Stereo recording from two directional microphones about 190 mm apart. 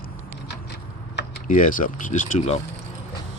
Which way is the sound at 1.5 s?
45° left (ahead or behind).